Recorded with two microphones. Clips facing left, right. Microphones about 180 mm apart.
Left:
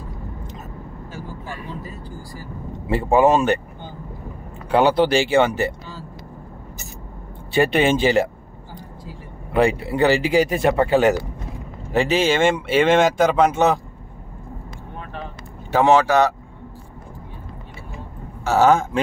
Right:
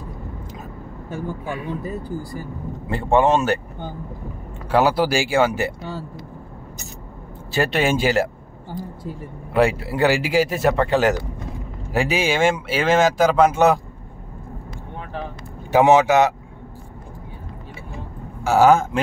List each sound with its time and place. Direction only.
1.1 s speech: 60° right (ahead or behind)
2.9 s speech: centre (ahead or behind)
4.6 s speech: 5° right (ahead or behind)
7.5 s speech: centre (ahead or behind)
9.5 s speech: 5° right (ahead or behind)
11.9 s speech: 10° right (ahead or behind)
15.7 s speech: 15° right (ahead or behind)
18.4 s speech: 10° right (ahead or behind)